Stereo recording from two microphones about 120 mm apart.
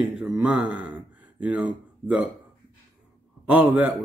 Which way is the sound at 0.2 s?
10° right (ahead or behind).